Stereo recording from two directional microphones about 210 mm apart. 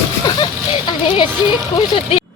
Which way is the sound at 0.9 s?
20° left (ahead or behind).